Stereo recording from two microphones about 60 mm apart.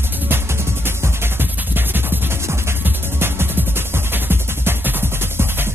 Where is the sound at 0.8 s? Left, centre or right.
Right.